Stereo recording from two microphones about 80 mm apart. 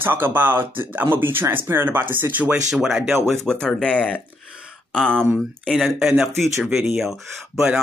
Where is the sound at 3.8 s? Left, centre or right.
Centre.